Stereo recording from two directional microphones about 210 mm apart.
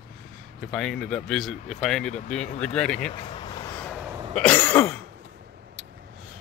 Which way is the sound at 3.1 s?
25° left (ahead or behind).